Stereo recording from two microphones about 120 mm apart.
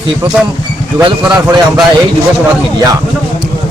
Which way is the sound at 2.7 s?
30° right (ahead or behind).